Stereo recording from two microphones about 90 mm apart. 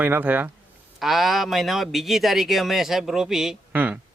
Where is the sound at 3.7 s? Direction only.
20° right (ahead or behind).